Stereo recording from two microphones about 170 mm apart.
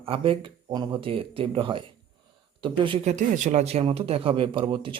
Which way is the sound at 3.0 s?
45° right (ahead or behind).